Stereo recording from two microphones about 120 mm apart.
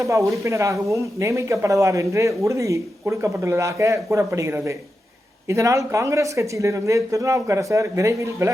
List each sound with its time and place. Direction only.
0.0 s speech: 25° right (ahead or behind)